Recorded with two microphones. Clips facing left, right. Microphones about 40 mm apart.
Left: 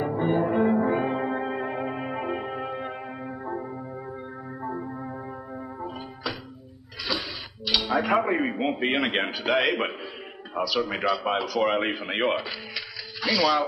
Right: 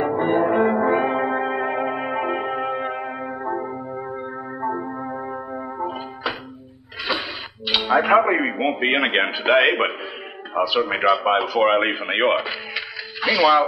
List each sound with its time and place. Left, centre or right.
0.0 s music: right
7.1 s a man's voice: right